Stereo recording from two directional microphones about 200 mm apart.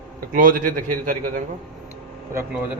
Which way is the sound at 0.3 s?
40° right (ahead or behind).